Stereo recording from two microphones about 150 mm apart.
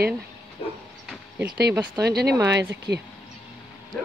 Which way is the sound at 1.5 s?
90° right.